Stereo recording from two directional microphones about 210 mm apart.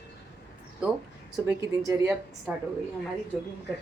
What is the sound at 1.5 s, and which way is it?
Speech, 15° right (ahead or behind).